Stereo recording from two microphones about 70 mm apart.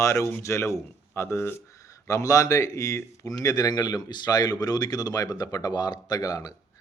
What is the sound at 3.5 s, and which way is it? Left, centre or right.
A man's voice, left.